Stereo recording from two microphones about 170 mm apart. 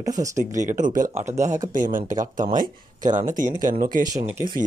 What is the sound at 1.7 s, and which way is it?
Speech, 50° right (ahead or behind).